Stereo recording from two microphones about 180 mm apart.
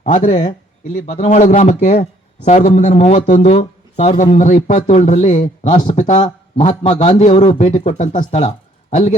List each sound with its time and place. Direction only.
0.0 s a man's voice: 35° left (ahead or behind)
5.7 s a man's voice: 25° left (ahead or behind)